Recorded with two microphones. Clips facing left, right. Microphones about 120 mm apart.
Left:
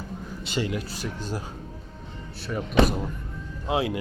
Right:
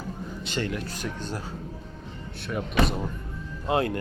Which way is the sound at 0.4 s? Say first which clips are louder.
Left 2 dB; 5° left (ahead or behind).